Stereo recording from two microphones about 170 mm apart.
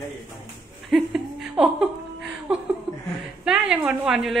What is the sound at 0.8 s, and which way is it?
Laughter, centre (ahead or behind).